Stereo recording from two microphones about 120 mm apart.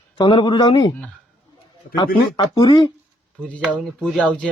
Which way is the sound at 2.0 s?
40° left (ahead or behind).